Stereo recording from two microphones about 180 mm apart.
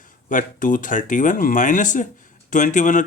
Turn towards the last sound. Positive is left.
turn(degrees=45)  # may be behind; listen again after turning